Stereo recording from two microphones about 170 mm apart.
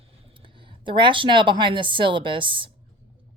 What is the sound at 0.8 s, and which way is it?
Speech, 30° right (ahead or behind).